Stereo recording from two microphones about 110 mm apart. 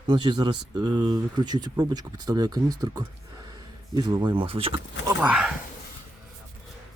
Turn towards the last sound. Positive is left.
turn(degrees=-10)  # may be behind; listen again after turning